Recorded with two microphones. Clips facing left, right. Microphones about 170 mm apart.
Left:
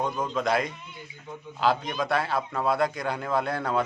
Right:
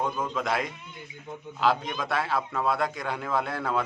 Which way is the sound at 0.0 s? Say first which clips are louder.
Left 2 dB; centre (ahead or behind).